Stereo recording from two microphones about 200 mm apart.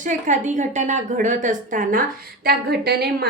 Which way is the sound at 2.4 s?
50° right (ahead or behind).